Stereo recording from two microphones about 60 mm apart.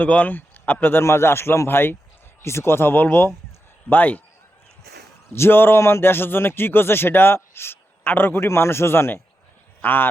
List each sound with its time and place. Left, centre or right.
0.0 s speech: left
1.0 s a man's voice: left
5.3 s a man's voice: left